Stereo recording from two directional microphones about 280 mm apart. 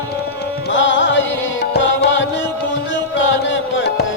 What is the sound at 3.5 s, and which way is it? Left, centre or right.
Music, left.